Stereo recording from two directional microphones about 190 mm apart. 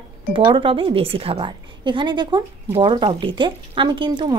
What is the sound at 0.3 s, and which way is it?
A woman's voice, 25° right (ahead or behind).